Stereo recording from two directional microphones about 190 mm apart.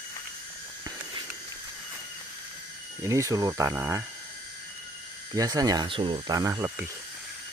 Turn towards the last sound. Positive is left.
turn(degrees=-15)  # may be behind; listen again after turning